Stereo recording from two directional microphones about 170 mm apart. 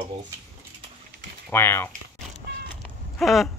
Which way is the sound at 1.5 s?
15° left (ahead or behind).